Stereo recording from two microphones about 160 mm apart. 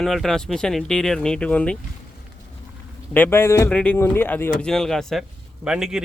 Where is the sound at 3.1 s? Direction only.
10° left (ahead or behind).